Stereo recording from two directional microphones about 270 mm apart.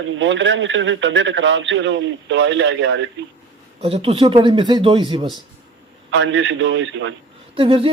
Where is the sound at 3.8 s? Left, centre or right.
Right.